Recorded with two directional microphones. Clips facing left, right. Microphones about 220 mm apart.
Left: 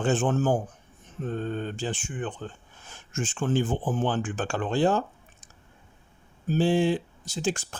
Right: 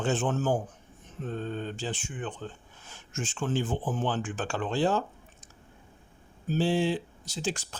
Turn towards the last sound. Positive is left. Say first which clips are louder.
# left 4 dB
turn(degrees=50)  # may be behind; listen again after turning